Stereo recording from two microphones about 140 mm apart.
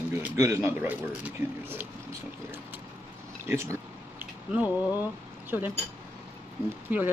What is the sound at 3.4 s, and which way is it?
Speech, 20° right (ahead or behind).